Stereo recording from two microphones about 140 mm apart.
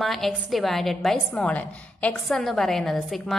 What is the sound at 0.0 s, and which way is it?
A woman's voice, centre (ahead or behind).